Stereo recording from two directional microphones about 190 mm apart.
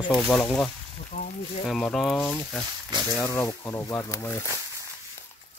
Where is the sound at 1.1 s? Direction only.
45° left (ahead or behind).